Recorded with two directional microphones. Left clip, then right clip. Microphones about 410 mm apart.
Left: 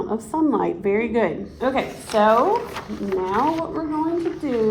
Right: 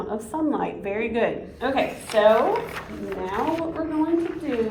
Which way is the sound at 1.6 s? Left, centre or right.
Centre.